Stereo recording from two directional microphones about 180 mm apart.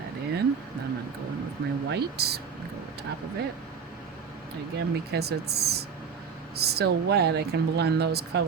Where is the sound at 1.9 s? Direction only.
65° right (ahead or behind).